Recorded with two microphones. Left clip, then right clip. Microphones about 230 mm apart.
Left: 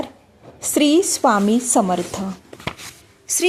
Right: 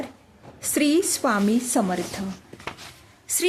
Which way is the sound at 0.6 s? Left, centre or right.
Centre.